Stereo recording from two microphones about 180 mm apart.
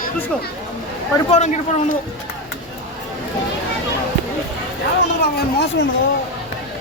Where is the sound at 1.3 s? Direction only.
40° left (ahead or behind).